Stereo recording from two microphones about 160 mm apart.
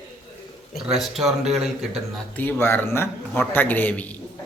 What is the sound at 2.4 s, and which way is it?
A man's voice, 15° left (ahead or behind).